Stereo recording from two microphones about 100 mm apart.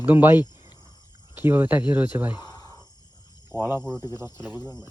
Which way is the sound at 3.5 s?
25° right (ahead or behind).